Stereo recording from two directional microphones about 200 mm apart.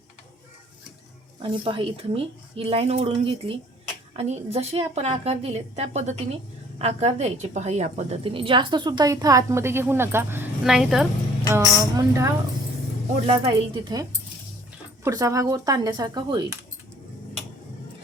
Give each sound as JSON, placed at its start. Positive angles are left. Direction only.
{"t": 1.4, "sound": "a woman's voice", "side_deg": -25}
{"t": 11.5, "sound": "a woman's voice", "side_deg": -15}
{"t": 13.2, "sound": "a woman's voice", "side_deg": -25}